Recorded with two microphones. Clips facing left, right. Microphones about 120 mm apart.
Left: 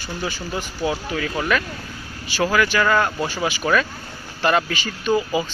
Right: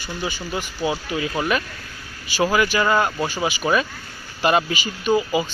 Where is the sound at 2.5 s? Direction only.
15° right (ahead or behind).